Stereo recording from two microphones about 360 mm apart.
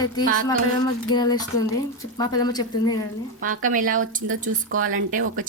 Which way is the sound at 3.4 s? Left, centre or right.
Right.